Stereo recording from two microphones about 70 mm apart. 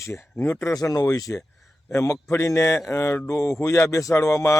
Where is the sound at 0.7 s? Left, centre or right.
Left.